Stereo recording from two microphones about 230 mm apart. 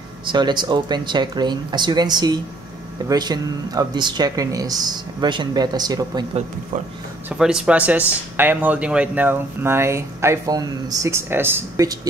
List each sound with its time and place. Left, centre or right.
0.3 s speech: centre
7.2 s speech: centre